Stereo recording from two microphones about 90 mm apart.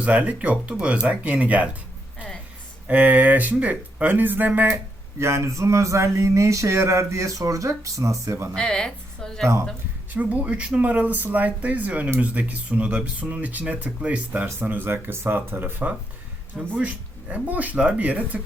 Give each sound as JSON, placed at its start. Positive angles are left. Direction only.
{"t": 0.0, "sound": "speech", "side_deg": -15}
{"t": 2.8, "sound": "speech", "side_deg": -20}
{"t": 5.2, "sound": "speech", "side_deg": -30}
{"t": 8.5, "sound": "a woman's voice", "side_deg": 10}
{"t": 10.2, "sound": "speech", "side_deg": -15}